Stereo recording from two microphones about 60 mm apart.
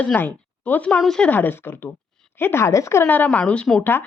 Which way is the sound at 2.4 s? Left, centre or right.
Left.